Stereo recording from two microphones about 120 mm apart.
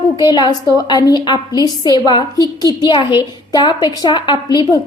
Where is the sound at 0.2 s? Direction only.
35° left (ahead or behind).